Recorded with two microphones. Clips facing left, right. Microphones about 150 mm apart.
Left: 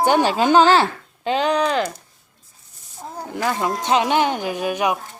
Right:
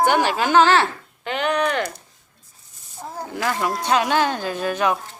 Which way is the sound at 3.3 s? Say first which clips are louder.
Left 2 dB; 20° left (ahead or behind).